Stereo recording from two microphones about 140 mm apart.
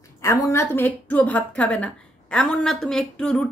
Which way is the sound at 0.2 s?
20° left (ahead or behind).